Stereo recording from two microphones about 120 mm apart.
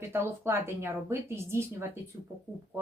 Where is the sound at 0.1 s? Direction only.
20° right (ahead or behind).